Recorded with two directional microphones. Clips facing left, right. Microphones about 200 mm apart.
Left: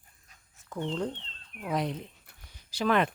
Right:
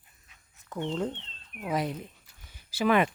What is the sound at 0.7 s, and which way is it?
Speech, centre (ahead or behind).